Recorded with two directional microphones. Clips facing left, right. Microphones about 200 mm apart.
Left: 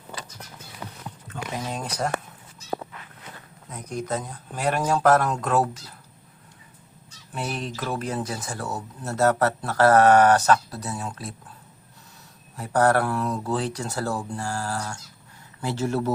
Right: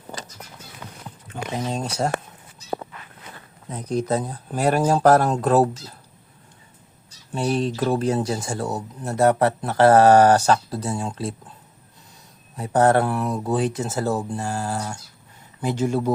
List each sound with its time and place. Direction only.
1.3 s speech: 25° right (ahead or behind)
3.7 s speech: 30° right (ahead or behind)
7.3 s speech: 30° right (ahead or behind)
12.5 s speech: 20° right (ahead or behind)